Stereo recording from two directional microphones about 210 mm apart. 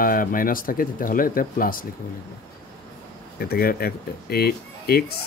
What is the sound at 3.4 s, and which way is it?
Speech, 45° left (ahead or behind).